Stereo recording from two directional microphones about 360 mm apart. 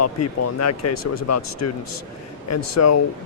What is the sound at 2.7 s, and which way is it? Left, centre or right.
Speech, left.